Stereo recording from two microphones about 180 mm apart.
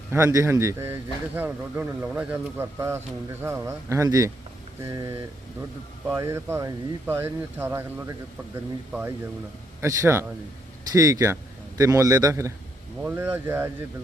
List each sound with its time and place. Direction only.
0.1 s a man's voice: 15° right (ahead or behind)